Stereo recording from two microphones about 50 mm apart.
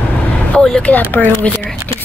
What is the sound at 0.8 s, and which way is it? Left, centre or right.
Speech, left.